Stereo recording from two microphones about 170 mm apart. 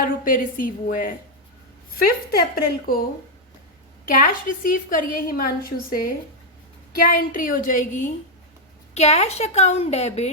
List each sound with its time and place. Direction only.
0.0 s a woman's voice: 55° left (ahead or behind)
4.0 s a woman's voice: 55° left (ahead or behind)